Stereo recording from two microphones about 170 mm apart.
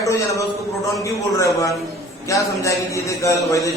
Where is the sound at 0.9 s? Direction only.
20° left (ahead or behind).